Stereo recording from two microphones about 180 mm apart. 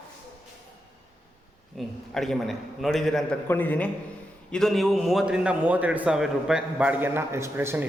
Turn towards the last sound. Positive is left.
turn(degrees=-15)  # may be behind; listen again after turning